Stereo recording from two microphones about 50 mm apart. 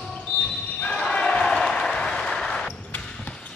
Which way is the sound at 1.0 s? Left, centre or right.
Centre.